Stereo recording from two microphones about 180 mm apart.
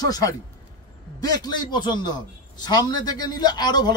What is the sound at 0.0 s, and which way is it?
Speech, 20° left (ahead or behind).